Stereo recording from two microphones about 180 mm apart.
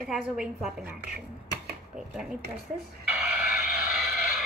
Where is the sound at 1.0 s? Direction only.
65° right (ahead or behind).